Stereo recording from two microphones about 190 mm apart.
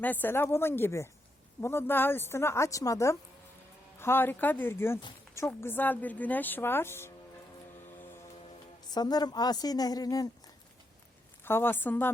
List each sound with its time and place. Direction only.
0.0 s speech: 10° left (ahead or behind)
8.9 s a woman's voice: 20° left (ahead or behind)